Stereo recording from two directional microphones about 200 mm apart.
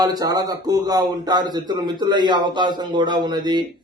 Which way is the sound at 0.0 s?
20° right (ahead or behind).